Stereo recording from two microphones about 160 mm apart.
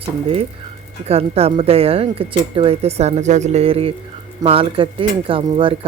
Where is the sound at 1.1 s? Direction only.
40° right (ahead or behind).